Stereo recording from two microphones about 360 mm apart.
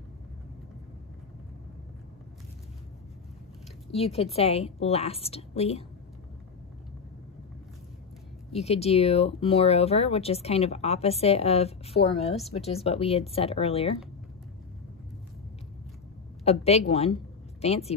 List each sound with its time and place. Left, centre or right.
3.9 s speech: centre
8.5 s speech: centre
16.4 s a woman's voice: centre